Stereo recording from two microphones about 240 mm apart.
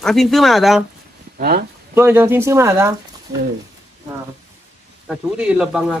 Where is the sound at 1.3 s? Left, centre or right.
Right.